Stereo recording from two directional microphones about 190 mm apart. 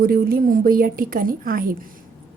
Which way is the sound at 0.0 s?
50° right (ahead or behind).